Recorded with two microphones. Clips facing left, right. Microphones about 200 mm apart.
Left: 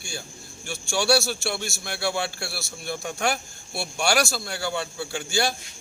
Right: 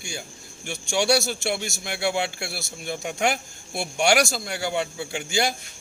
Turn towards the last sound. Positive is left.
turn(degrees=-15)  # may be behind; listen again after turning